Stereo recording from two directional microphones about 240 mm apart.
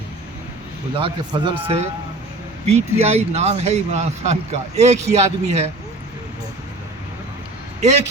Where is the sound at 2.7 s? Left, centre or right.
Right.